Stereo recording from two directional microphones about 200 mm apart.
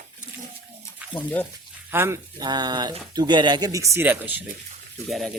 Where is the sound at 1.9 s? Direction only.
10° right (ahead or behind).